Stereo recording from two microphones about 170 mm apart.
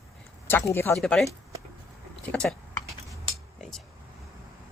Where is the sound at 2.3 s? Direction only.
5° left (ahead or behind).